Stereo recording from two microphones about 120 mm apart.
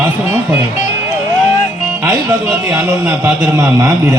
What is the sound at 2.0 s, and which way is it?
A man's voice, 20° right (ahead or behind).